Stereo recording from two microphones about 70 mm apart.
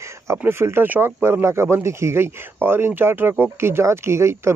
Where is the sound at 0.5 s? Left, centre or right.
Right.